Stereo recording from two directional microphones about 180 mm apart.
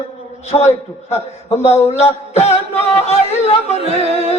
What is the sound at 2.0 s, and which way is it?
Music, 35° left (ahead or behind).